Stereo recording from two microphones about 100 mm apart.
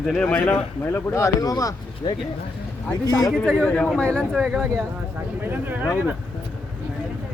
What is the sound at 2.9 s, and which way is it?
Speech, 40° left (ahead or behind).